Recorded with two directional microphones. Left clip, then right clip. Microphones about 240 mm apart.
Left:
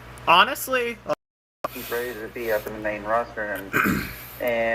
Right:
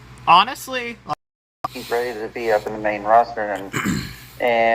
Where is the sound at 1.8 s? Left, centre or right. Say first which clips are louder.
Right 8 dB; right.